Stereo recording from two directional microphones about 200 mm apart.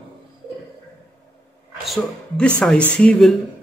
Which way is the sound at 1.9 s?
5° left (ahead or behind).